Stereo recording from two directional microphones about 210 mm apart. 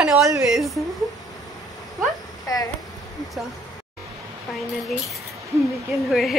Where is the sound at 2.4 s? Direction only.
15° left (ahead or behind).